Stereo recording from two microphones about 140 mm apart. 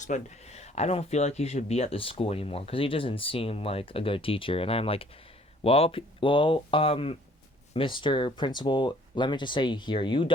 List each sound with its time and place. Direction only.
0.0 s speech: 55° left (ahead or behind); by 10.3 s 35° left (ahead or behind)